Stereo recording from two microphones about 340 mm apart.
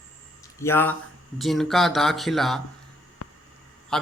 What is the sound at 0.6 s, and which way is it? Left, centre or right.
A man's voice, centre.